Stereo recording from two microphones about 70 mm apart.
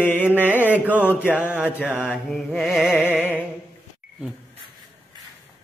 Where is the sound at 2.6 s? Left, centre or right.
Centre.